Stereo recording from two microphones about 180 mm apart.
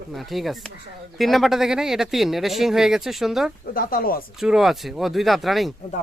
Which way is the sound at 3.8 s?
55° left (ahead or behind).